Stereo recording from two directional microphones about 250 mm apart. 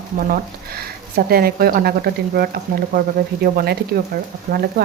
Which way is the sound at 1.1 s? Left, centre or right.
Right.